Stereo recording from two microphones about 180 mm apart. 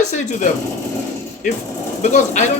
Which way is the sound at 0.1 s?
40° left (ahead or behind).